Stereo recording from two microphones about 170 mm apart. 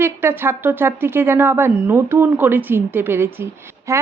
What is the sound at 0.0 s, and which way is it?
A woman's voice, 15° right (ahead or behind).